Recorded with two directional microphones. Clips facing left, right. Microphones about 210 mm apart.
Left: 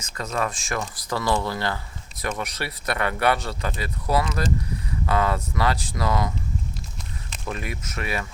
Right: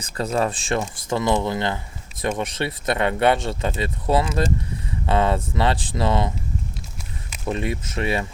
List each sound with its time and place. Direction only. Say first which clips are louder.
0.0 s speech: right 5 dB; 30° right (ahead or behind)
7.4 s speech: right 7 dB; 25° right (ahead or behind)